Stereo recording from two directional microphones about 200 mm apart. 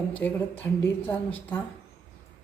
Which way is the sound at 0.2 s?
10° left (ahead or behind).